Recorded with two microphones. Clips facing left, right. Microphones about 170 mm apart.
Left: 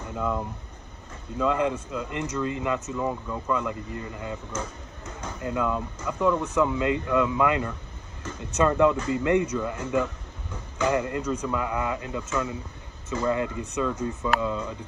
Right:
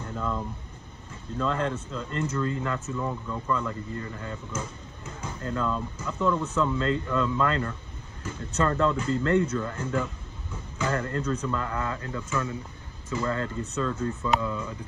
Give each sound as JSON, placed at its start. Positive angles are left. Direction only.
{"t": 0.1, "sound": "speech", "side_deg": 10}
{"t": 1.4, "sound": "speech", "side_deg": 10}
{"t": 5.4, "sound": "speech", "side_deg": 15}